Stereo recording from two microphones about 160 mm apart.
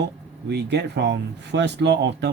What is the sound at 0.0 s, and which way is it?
Speech, 90° right.